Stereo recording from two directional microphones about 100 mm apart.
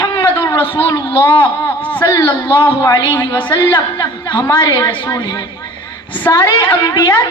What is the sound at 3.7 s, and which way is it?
A woman's voice, 50° left (ahead or behind).